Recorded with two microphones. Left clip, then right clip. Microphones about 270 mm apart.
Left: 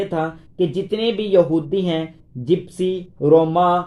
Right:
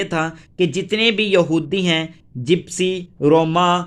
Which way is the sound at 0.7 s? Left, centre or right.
Right.